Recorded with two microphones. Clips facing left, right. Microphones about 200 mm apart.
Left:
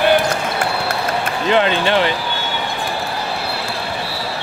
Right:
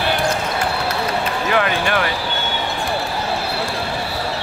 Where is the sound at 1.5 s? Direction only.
25° left (ahead or behind).